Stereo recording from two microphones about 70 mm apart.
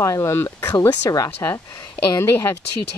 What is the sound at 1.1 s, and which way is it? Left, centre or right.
Speech, left.